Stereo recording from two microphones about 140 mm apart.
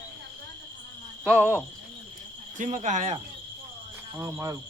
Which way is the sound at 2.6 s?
60° right (ahead or behind).